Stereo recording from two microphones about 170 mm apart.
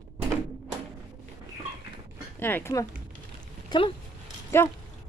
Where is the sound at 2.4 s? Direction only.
15° left (ahead or behind).